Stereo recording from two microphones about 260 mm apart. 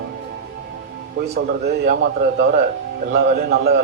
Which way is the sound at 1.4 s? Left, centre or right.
Right.